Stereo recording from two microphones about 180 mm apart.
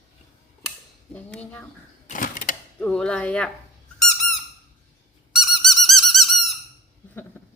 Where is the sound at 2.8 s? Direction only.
5° left (ahead or behind).